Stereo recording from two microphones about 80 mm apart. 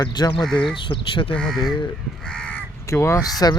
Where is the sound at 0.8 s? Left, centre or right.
Left.